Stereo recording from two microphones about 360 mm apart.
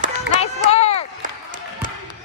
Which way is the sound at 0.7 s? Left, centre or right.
Centre.